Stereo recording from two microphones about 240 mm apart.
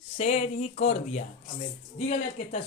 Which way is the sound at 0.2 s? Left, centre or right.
Left.